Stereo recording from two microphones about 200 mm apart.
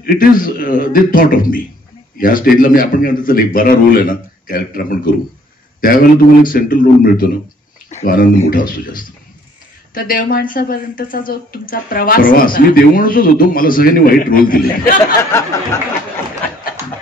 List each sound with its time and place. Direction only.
0.0 s speech: 45° left (ahead or behind)